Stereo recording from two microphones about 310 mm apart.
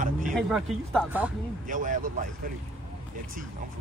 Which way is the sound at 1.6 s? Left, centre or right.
Right.